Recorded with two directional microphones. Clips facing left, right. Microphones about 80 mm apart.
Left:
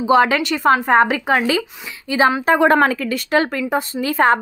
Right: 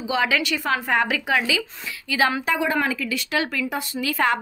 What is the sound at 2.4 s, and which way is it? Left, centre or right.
Speech, left.